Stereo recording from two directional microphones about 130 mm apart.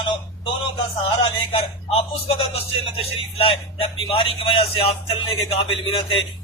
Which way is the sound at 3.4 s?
45° left (ahead or behind).